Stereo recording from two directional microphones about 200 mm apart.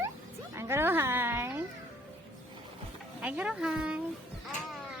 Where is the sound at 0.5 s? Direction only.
10° right (ahead or behind).